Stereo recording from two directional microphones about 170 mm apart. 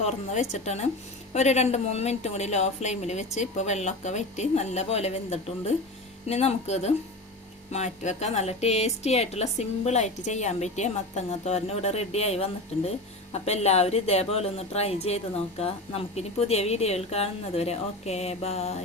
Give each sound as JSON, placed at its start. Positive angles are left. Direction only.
{"t": 0.0, "sound": "speech", "side_deg": 40}